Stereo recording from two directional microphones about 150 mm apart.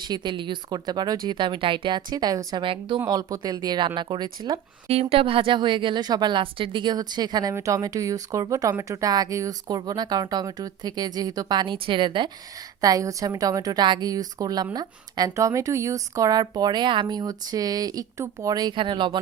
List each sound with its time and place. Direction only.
0.0 s a woman's voice: 30° right (ahead or behind)
3.0 s a woman's voice: 25° right (ahead or behind)
4.9 s a woman's voice: 40° right (ahead or behind)